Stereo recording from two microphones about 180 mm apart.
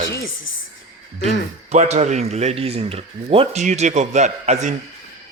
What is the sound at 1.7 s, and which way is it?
Speech, 40° right (ahead or behind).